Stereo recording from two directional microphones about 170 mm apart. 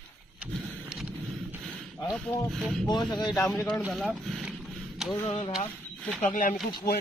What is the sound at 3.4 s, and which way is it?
Speech, 5° left (ahead or behind).